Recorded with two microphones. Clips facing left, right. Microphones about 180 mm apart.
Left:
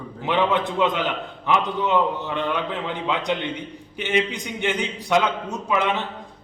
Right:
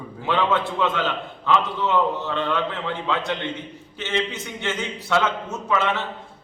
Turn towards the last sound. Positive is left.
turn(degrees=15)  # may be behind; listen again after turning